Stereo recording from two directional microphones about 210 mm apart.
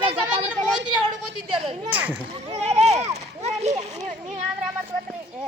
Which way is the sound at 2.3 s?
30° right (ahead or behind).